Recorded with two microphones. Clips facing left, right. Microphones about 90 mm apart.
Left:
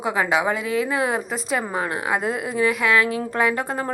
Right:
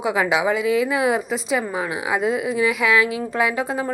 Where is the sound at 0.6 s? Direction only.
40° left (ahead or behind).